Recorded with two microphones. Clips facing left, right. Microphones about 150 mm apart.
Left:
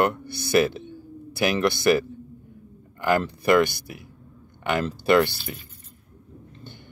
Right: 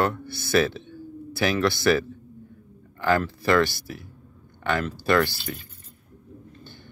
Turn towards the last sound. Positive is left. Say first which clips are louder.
# left 3 dB
turn(degrees=20)  # may be behind; listen again after turning